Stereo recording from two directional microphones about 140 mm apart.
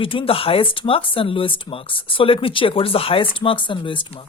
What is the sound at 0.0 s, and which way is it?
Speech, 40° left (ahead or behind).